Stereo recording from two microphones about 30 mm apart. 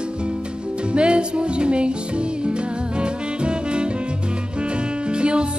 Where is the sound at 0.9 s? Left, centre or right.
Right.